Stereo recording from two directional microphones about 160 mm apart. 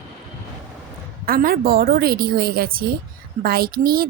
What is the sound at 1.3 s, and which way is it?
A woman's voice, 65° right (ahead or behind).